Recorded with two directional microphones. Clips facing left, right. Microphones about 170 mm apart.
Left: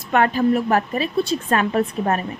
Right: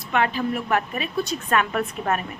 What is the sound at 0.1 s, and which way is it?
A woman's voice, 45° left (ahead or behind).